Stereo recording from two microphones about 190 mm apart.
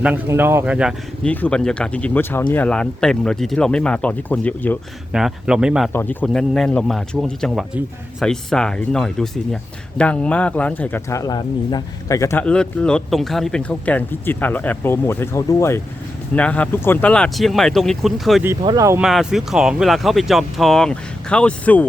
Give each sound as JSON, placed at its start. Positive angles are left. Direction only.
{"t": 0.0, "sound": "speech", "side_deg": -10}
{"t": 1.2, "sound": "speech", "side_deg": 5}
{"t": 5.1, "sound": "speech", "side_deg": -5}
{"t": 5.9, "sound": "speech", "side_deg": 10}
{"t": 18.6, "sound": "speech", "side_deg": -20}
{"t": 19.0, "sound": "speech", "side_deg": 0}